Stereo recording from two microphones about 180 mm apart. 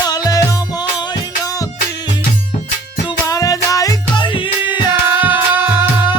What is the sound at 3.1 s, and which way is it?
Music, 20° left (ahead or behind).